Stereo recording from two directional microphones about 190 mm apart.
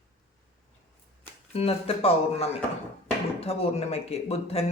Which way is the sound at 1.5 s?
30° left (ahead or behind).